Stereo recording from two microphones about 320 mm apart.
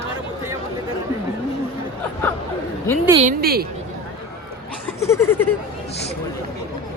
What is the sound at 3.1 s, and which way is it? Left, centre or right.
Speech, right.